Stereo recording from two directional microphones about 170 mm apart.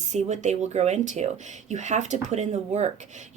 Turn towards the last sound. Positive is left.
turn(degrees=-40)  # may be behind; listen again after turning